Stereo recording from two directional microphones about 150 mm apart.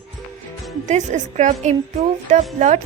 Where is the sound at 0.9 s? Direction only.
55° right (ahead or behind).